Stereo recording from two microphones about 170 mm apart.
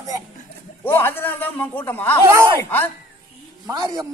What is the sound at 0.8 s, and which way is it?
A man's voice, 15° left (ahead or behind).